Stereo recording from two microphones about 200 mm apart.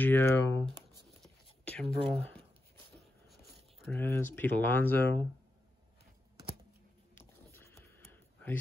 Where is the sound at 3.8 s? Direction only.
10° left (ahead or behind).